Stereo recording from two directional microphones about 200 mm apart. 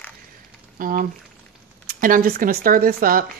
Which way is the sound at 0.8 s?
45° right (ahead or behind).